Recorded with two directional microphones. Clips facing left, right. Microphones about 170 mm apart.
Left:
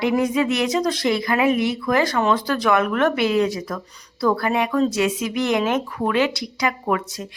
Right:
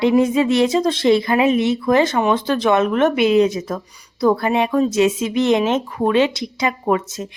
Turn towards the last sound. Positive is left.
turn(degrees=-25)  # may be behind; listen again after turning